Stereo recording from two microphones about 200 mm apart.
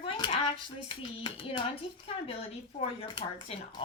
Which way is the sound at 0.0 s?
25° left (ahead or behind).